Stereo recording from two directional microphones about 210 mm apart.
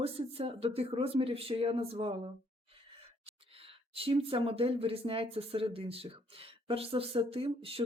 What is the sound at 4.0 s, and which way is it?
A woman's voice, 25° right (ahead or behind).